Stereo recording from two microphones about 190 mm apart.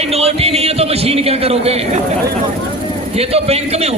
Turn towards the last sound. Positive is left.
turn(degrees=-35)  # may be behind; listen again after turning